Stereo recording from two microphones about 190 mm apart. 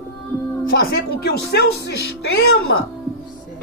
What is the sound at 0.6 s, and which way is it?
Speech, 55° left (ahead or behind).